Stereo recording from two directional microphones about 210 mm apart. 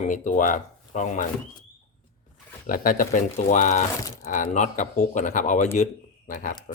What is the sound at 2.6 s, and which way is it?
Speech, 40° left (ahead or behind).